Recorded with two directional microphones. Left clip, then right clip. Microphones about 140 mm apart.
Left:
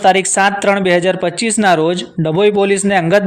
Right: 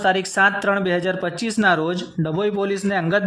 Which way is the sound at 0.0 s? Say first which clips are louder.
Left 6 dB; 20° left (ahead or behind).